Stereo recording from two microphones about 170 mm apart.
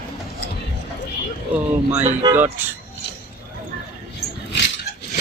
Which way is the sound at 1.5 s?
10° right (ahead or behind).